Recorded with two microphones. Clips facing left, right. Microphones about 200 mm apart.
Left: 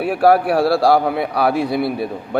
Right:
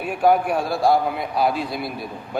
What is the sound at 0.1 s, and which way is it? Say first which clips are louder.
A man's voice: left 4 dB; 75° left (ahead or behind).